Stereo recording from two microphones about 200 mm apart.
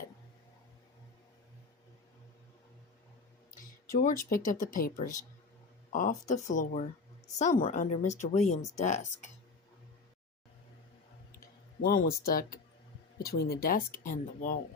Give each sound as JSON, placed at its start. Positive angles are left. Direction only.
{"t": 3.9, "sound": "speech", "side_deg": 40}
{"t": 11.3, "sound": "clicking", "side_deg": 45}
{"t": 13.2, "sound": "speech", "side_deg": 50}